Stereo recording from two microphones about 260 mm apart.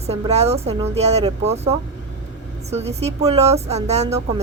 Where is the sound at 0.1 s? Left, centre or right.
Right.